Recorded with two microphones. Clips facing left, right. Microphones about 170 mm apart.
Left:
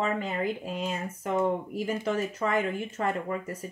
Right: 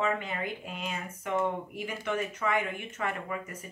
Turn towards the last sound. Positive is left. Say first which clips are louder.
# left 5 dB
turn(degrees=35)  # may be behind; listen again after turning